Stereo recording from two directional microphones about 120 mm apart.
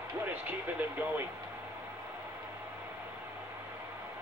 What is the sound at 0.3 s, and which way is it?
Speech, 15° right (ahead or behind).